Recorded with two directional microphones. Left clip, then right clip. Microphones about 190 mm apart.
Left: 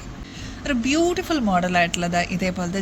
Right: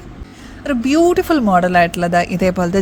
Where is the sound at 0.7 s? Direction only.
45° right (ahead or behind).